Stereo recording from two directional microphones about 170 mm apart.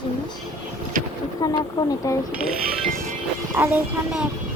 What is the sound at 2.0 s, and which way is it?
Speech, 20° left (ahead or behind).